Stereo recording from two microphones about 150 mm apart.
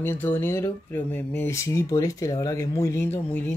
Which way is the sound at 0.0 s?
15° left (ahead or behind).